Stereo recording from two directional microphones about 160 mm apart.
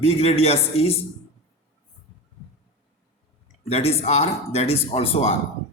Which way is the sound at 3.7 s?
40° left (ahead or behind).